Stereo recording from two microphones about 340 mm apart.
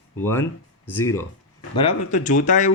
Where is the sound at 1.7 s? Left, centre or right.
Centre.